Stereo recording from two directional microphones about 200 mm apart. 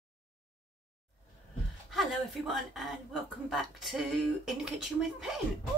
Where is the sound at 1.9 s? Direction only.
Centre (ahead or behind).